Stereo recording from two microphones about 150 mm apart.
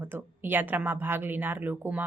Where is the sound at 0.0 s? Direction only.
15° right (ahead or behind).